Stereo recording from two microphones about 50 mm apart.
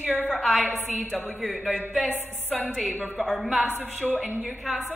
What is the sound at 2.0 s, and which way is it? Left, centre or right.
Music, left.